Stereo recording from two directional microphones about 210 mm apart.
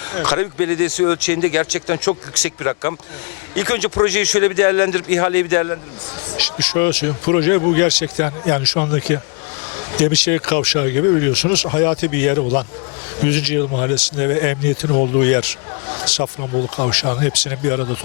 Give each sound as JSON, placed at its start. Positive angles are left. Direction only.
{"t": 0.1, "sound": "speech", "side_deg": 15}